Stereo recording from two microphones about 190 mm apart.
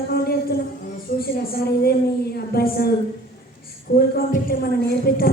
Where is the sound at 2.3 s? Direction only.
55° left (ahead or behind).